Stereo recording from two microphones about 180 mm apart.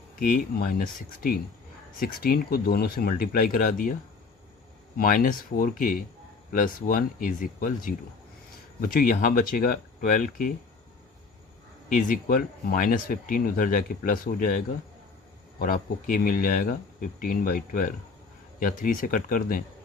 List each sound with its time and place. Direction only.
0.2 s speech: 50° left (ahead or behind)
4.9 s speech: 50° left (ahead or behind)
11.9 s speech: 50° left (ahead or behind)